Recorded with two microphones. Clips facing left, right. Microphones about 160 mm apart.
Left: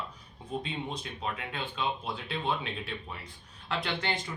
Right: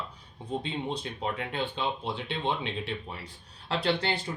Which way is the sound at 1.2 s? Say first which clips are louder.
Right 4 dB; 30° right (ahead or behind).